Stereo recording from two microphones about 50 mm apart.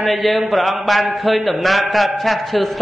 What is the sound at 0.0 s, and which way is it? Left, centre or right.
A man's voice, centre.